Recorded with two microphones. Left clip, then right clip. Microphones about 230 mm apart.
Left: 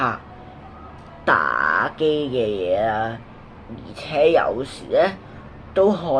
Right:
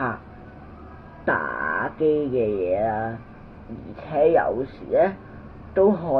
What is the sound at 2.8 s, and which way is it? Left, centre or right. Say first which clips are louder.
Speech: left 3 dB; centre.